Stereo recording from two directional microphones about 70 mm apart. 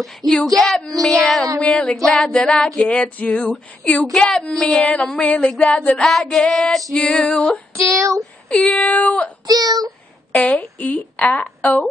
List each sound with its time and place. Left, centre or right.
0.2 s child singing: right
0.6 s female singing: centre
5.9 s female singing: centre
7.7 s speech: right
8.5 s female singing: centre
9.5 s child singing: right
10.3 s speech: left